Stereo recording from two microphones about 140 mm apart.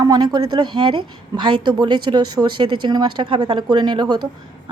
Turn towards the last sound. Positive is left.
turn(degrees=-30)  # may be behind; listen again after turning